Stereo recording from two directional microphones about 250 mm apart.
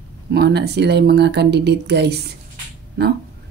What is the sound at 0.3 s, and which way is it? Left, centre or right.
Speech, right.